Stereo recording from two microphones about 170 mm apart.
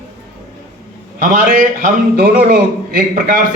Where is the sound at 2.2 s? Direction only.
60° right (ahead or behind).